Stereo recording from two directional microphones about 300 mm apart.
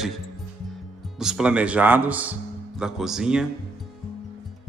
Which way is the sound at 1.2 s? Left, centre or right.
Centre.